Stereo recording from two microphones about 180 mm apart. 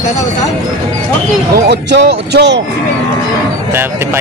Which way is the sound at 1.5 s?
70° right (ahead or behind).